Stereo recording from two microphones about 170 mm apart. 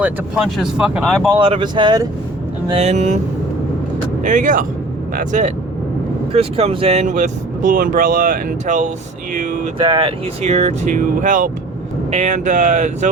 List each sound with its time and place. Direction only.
0.0 s speech: centre (ahead or behind)
1.4 s speech: 30° right (ahead or behind)
2.7 s speech: 40° right (ahead or behind)
4.2 s speech: 50° right (ahead or behind)
6.3 s speech: 35° right (ahead or behind)
9.8 s speech: 30° right (ahead or behind); by 13.1 s 45° right (ahead or behind)